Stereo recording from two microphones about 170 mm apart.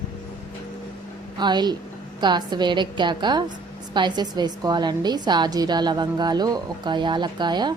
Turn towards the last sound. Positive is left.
turn(degrees=-25)  # may be behind; listen again after turning